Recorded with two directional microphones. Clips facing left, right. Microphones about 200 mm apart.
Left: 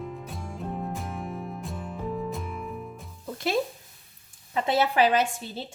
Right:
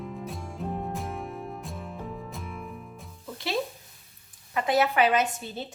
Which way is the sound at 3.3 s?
50° left (ahead or behind).